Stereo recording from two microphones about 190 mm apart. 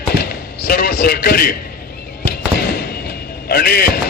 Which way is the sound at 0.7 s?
50° left (ahead or behind).